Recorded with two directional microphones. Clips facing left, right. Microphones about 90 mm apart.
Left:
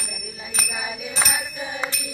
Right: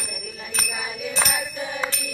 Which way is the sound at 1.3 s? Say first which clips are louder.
Right 1 dB; 20° left (ahead or behind).